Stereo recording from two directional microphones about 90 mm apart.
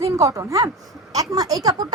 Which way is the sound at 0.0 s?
35° right (ahead or behind).